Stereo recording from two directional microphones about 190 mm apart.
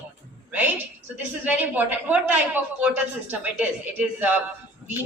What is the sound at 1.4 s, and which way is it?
A woman's voice, 10° right (ahead or behind).